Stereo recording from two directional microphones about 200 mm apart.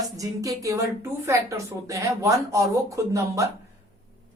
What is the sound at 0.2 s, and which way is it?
A woman's voice, 15° right (ahead or behind).